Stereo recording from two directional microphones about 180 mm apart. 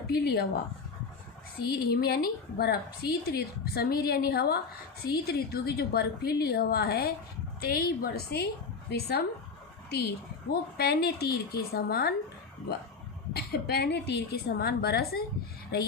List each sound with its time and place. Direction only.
0.1 s a woman's voice: 60° left (ahead or behind)
1.6 s a woman's voice: 60° left (ahead or behind)
10.5 s a woman's voice: 60° left (ahead or behind)
13.3 s a woman's voice: 60° left (ahead or behind)